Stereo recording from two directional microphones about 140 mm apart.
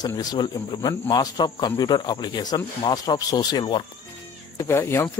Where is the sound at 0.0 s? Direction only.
30° left (ahead or behind).